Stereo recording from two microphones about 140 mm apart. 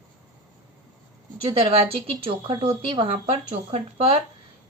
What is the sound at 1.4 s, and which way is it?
Speech, 40° right (ahead or behind).